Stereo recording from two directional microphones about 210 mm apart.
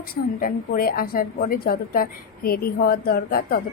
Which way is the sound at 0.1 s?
45° left (ahead or behind).